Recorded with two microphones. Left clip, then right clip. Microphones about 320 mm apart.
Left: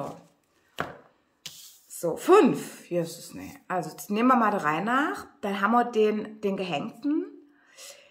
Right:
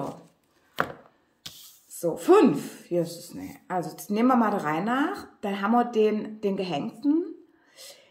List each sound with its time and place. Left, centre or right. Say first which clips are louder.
1.9 s a woman's voice: even; centre